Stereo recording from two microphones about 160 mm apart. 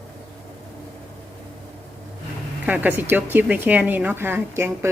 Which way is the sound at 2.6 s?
10° right (ahead or behind).